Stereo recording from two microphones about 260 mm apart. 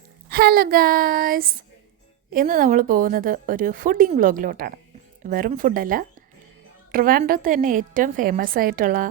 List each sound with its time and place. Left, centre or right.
0.3 s a woman's voice: right